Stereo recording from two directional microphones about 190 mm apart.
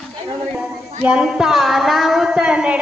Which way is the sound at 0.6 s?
5° right (ahead or behind).